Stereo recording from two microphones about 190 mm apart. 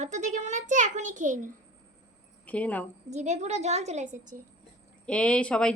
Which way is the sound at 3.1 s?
35° right (ahead or behind).